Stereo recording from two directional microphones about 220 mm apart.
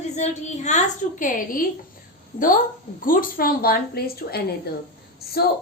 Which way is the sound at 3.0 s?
40° left (ahead or behind).